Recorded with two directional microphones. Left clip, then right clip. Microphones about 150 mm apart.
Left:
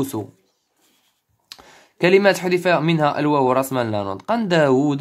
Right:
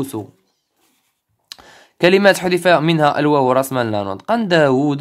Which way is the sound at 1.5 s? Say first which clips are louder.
Right 4 dB; 20° right (ahead or behind).